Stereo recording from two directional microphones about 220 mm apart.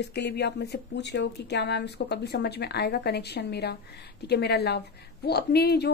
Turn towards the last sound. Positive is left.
turn(degrees=45)  # may be behind; listen again after turning